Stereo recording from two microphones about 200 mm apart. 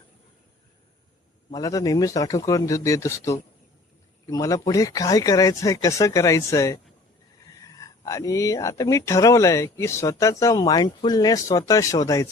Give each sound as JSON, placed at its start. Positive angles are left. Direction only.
{"t": 1.5, "sound": "speech", "side_deg": 20}